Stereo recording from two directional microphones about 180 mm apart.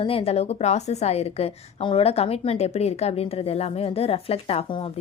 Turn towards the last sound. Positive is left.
turn(degrees=35)  # may be behind; listen again after turning